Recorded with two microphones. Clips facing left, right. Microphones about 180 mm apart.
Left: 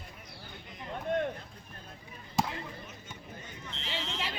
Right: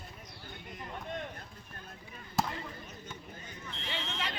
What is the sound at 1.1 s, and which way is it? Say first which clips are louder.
Run: left 10 dB; 55° left (ahead or behind).